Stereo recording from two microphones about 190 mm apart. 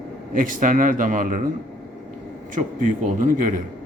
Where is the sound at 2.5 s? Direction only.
45° right (ahead or behind).